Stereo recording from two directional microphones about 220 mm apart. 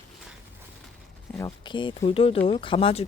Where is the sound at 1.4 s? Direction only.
20° left (ahead or behind).